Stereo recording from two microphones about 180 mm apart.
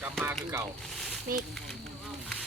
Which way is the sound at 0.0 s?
10° right (ahead or behind).